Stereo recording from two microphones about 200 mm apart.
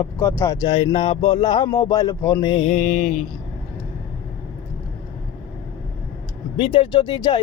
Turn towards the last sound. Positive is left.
turn(degrees=20)  # may be behind; listen again after turning